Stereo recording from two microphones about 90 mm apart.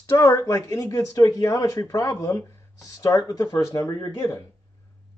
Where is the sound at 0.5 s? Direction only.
40° left (ahead or behind).